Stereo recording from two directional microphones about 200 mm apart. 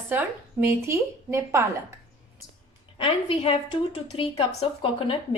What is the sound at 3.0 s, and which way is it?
A woman's voice, 30° left (ahead or behind).